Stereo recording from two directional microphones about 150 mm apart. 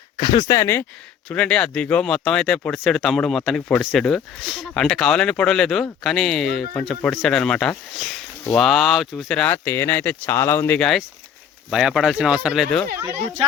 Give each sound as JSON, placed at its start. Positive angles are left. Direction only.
{"t": 0.2, "sound": "speech", "side_deg": 25}
{"t": 1.3, "sound": "speech", "side_deg": 5}
{"t": 11.7, "sound": "speech", "side_deg": -5}